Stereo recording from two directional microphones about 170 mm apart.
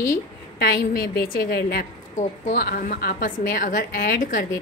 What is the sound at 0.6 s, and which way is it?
A woman's voice, 65° left (ahead or behind).